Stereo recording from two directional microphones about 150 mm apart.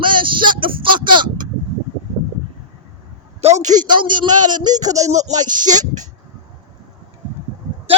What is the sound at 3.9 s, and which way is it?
A man's voice, 30° right (ahead or behind).